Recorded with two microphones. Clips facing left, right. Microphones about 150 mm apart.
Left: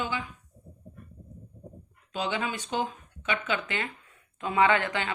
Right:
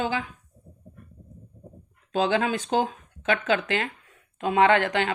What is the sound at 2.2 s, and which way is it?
Speech, 90° right.